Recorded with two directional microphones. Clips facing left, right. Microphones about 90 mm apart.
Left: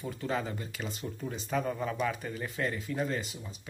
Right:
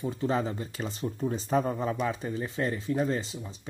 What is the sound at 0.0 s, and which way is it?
Speech, 30° right (ahead or behind).